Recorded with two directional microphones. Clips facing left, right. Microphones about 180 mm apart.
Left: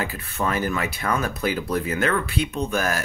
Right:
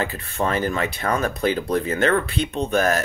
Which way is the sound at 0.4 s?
30° right (ahead or behind).